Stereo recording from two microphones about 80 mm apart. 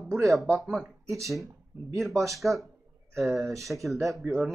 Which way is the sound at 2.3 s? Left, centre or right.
Centre.